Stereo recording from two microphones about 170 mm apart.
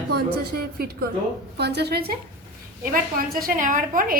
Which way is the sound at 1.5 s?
75° right (ahead or behind).